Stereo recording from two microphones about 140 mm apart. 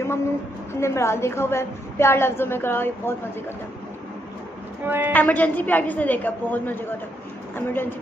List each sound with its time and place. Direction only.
0.7 s a woman's voice: 20° left (ahead or behind)
4.8 s a woman's voice: 15° right (ahead or behind)
5.1 s a woman's voice: 10° left (ahead or behind)